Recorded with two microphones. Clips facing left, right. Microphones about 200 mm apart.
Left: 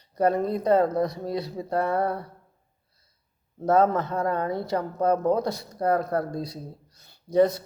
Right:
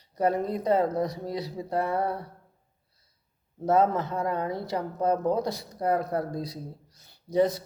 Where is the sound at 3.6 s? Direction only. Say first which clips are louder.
Left 2 dB; 15° right (ahead or behind).